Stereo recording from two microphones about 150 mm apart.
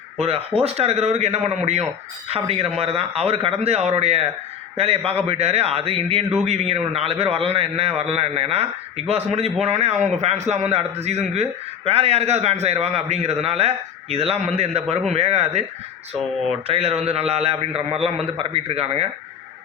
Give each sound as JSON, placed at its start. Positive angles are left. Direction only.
{"t": 0.2, "sound": "a man's voice", "side_deg": -40}